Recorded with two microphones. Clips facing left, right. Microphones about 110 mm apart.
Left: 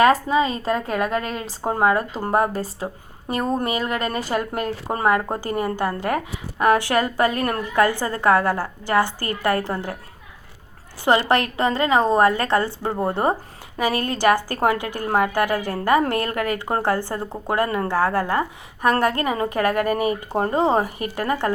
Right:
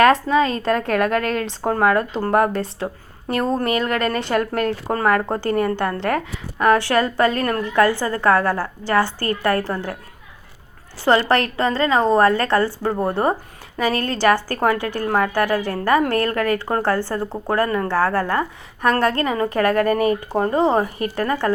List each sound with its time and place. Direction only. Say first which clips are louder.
0.0 s a woman's voice: right 2 dB; 5° left (ahead or behind)
11.0 s a woman's voice: right 2 dB; 20° left (ahead or behind)
19.9 s speech: right 3 dB; 45° right (ahead or behind)
20.3 s a woman's voice: even; 25° left (ahead or behind)